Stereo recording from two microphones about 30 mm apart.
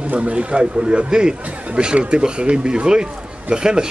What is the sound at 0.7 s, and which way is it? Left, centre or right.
Speech, right.